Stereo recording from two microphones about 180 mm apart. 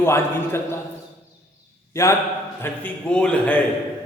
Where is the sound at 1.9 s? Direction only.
15° left (ahead or behind).